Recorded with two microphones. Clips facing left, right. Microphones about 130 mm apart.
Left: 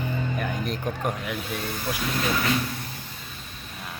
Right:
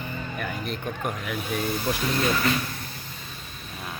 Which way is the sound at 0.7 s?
35° left (ahead or behind).